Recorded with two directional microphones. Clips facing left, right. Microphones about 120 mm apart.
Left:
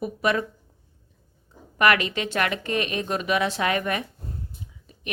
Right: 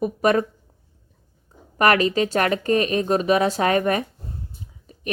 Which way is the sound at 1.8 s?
35° right (ahead or behind).